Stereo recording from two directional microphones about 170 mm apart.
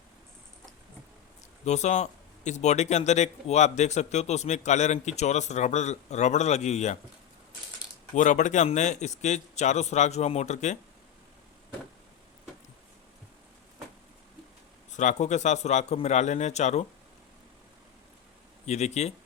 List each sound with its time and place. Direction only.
1.6 s a man's voice: 40° left (ahead or behind)
8.1 s a man's voice: 45° left (ahead or behind)
14.8 s a man's voice: 45° left (ahead or behind)
18.6 s a man's voice: 40° left (ahead or behind)